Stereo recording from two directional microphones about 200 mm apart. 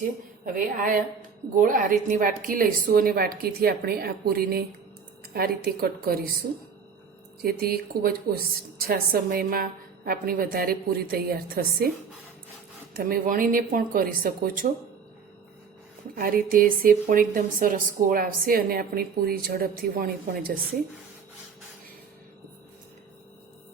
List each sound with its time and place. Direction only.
0.4 s a woman's voice: 40° right (ahead or behind)
13.0 s a woman's voice: 45° right (ahead or behind)
16.1 s a woman's voice: 45° right (ahead or behind)